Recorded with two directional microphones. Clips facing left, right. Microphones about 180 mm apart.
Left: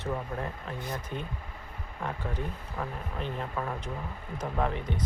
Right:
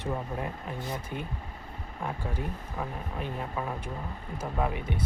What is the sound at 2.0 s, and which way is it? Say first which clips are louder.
Speech: even; 10° right (ahead or behind).